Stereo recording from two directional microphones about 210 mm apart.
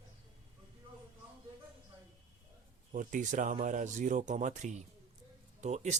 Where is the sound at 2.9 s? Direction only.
35° right (ahead or behind).